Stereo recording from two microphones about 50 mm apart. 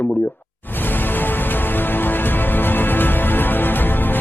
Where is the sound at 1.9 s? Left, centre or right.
Left.